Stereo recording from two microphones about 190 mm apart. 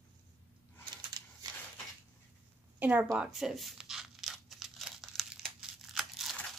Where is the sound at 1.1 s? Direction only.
20° right (ahead or behind).